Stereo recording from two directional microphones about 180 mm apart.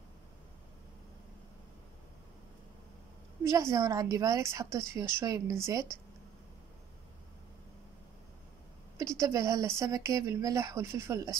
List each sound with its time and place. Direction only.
3.4 s speech: 20° right (ahead or behind)
8.9 s speech: 15° right (ahead or behind)